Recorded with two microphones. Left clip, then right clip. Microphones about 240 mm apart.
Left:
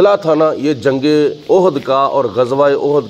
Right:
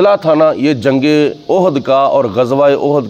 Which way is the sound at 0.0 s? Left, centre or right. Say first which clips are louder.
Right 2 dB; right.